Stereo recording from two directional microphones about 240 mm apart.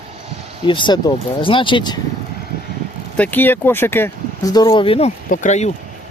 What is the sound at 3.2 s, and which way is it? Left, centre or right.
Speech, centre.